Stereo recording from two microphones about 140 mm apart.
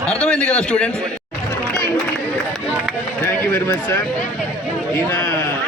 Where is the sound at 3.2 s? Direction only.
15° left (ahead or behind).